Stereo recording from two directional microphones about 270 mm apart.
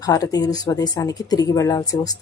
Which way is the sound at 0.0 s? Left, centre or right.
Centre.